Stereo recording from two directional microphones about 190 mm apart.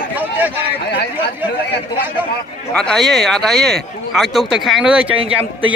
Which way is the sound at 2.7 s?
5° left (ahead or behind).